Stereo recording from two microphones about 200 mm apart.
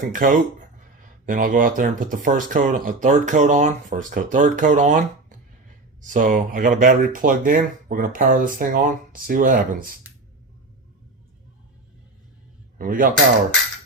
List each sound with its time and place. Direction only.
0.0 s speech: 40° right (ahead or behind)
12.8 s speech: 40° right (ahead or behind)